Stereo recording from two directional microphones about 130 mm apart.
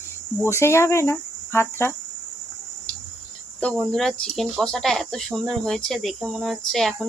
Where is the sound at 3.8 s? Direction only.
5° left (ahead or behind).